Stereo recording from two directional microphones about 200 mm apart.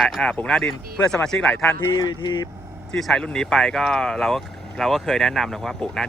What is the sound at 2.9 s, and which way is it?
Speech, centre (ahead or behind).